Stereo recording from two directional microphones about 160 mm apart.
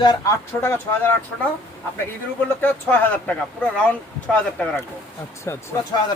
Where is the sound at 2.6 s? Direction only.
10° left (ahead or behind).